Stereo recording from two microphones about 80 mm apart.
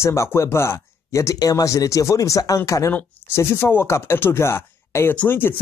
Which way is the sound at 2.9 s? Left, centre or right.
Left.